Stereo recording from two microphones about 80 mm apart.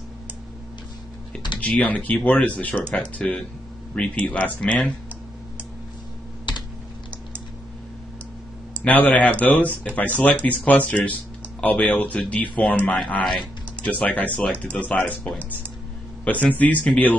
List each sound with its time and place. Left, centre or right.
1.6 s speech: centre
8.8 s speech: centre